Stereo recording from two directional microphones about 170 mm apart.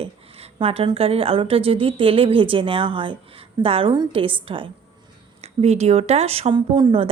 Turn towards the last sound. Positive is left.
turn(degrees=-30)  # may be behind; listen again after turning